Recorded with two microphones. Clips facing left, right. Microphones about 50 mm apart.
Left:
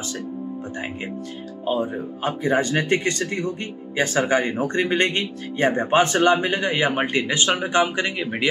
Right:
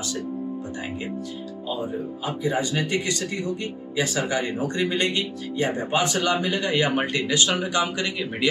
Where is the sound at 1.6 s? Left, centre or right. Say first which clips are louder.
Left 5 dB; left.